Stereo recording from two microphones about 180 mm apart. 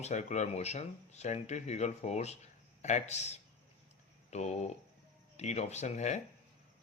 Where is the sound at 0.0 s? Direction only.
40° left (ahead or behind).